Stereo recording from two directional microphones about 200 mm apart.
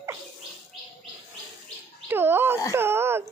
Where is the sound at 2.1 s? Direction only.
10° right (ahead or behind).